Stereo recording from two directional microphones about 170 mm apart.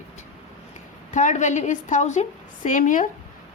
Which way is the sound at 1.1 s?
45° left (ahead or behind).